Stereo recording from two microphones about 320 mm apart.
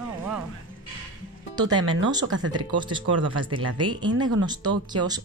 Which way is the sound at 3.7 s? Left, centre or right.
Centre.